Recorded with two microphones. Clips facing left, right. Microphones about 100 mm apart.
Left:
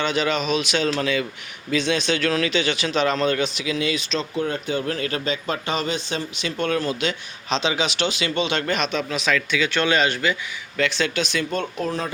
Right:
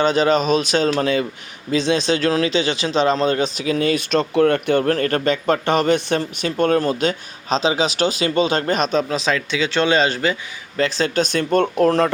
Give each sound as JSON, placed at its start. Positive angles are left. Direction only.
{"t": 0.0, "sound": "speech", "side_deg": -40}